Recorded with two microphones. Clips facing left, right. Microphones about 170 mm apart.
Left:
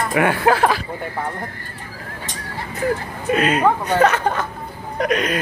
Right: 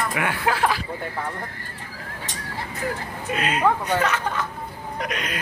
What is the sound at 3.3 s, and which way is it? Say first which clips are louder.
Speech: left 5 dB; 45° left (ahead or behind).